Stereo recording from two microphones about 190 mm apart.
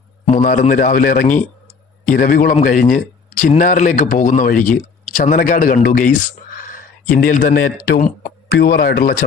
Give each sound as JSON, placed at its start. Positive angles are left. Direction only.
{"t": 0.3, "sound": "a man's voice", "side_deg": 40}